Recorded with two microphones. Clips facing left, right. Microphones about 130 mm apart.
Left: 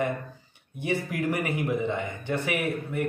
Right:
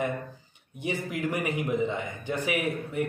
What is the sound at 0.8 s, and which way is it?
A man's voice, 20° right (ahead or behind).